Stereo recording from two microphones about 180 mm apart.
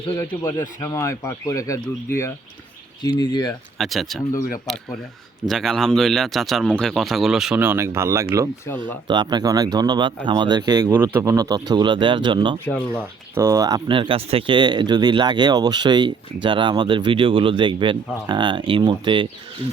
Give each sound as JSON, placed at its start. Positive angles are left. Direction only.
{"t": 0.4, "sound": "speech", "side_deg": 15}
{"t": 3.0, "sound": "speech", "side_deg": 25}
{"t": 3.8, "sound": "speech", "side_deg": 0}
{"t": 12.6, "sound": "speech", "side_deg": 5}
{"t": 13.3, "sound": "speech", "side_deg": -15}